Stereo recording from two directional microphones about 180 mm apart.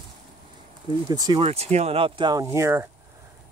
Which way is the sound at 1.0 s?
20° right (ahead or behind).